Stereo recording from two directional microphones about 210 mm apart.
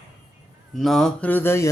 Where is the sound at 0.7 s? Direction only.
Centre (ahead or behind).